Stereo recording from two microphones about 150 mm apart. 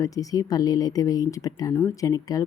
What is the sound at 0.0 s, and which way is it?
Speech, 25° left (ahead or behind).